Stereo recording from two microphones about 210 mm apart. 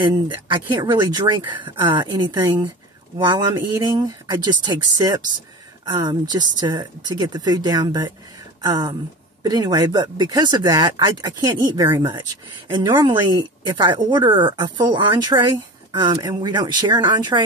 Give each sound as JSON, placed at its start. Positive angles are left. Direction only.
{"t": 0.5, "sound": "speech", "side_deg": -20}